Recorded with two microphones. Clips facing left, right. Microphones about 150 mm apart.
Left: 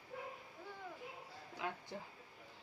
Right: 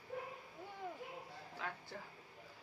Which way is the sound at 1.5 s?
15° left (ahead or behind).